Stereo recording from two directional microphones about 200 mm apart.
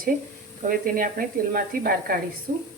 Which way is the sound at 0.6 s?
45° right (ahead or behind).